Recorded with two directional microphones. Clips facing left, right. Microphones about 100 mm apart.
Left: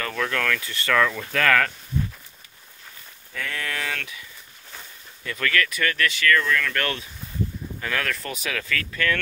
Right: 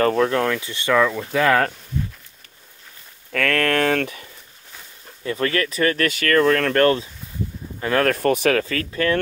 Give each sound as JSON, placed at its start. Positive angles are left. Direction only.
{"t": 0.0, "sound": "speech", "side_deg": -35}
{"t": 3.3, "sound": "speech", "side_deg": -70}
{"t": 5.2, "sound": "speech", "side_deg": -30}
{"t": 8.5, "sound": "speech", "side_deg": -35}